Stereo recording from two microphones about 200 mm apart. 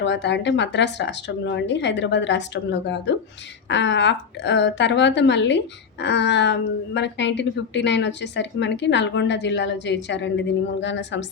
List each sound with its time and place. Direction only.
0.0 s a woman's voice: 60° left (ahead or behind)